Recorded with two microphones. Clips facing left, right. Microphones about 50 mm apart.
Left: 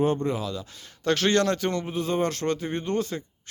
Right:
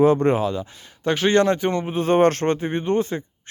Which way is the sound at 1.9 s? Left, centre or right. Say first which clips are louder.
Right 9 dB; right.